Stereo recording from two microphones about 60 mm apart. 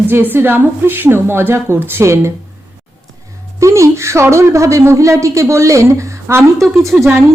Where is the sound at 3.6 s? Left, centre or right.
Right.